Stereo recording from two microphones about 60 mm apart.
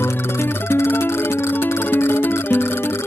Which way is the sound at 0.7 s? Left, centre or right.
Left.